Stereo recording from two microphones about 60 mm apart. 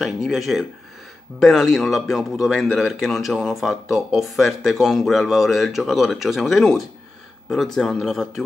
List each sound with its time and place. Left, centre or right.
0.0 s speech: centre